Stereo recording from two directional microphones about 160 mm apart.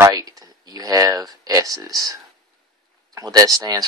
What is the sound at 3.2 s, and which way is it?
Speech, 25° right (ahead or behind).